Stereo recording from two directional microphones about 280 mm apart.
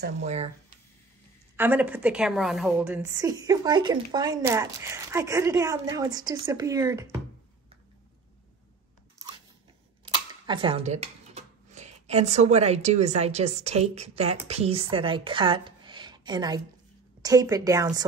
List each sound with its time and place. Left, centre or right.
0.2 s speech: right
1.6 s a woman's voice: centre
10.0 s a woman's voice: centre